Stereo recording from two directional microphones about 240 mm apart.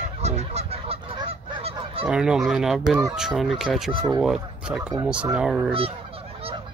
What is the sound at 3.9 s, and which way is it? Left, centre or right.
Speech, centre.